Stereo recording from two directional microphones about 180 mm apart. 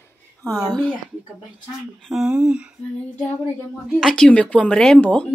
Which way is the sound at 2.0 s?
5° right (ahead or behind).